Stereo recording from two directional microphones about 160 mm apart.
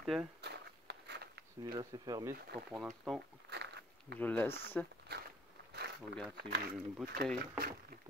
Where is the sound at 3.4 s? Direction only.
90° right.